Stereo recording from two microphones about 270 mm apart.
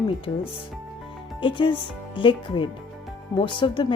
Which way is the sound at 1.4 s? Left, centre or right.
Centre.